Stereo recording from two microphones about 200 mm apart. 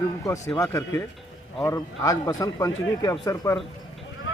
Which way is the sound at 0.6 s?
15° left (ahead or behind).